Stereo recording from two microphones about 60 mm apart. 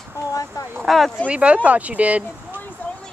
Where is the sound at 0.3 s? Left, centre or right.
Left.